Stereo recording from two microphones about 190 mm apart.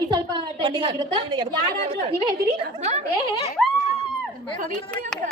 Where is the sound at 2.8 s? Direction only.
35° right (ahead or behind).